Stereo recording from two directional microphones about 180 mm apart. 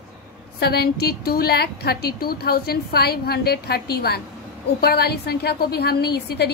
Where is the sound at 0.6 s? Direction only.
60° left (ahead or behind).